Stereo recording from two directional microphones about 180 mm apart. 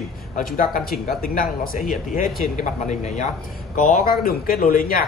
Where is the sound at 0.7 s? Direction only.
55° left (ahead or behind); by 3.3 s 40° left (ahead or behind).